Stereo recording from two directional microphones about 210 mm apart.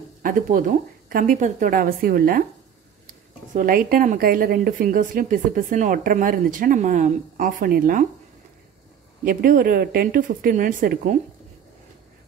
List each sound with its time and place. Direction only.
0.2 s a woman's voice: 40° right (ahead or behind)
3.5 s a woman's voice: 40° right (ahead or behind)
9.2 s a woman's voice: 40° right (ahead or behind)